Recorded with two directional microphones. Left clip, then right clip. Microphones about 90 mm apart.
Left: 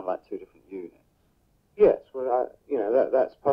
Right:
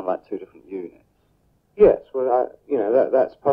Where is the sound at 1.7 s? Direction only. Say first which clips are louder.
Right 5 dB; 40° left (ahead or behind).